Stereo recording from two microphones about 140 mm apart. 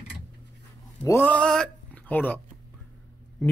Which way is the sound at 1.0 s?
15° left (ahead or behind).